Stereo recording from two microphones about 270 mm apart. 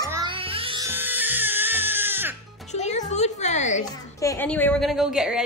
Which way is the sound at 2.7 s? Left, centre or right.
Left.